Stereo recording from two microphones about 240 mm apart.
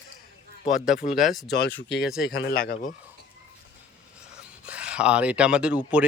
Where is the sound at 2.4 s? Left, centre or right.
Left.